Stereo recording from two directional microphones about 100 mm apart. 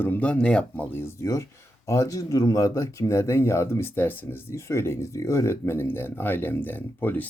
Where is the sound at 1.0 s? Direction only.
30° left (ahead or behind).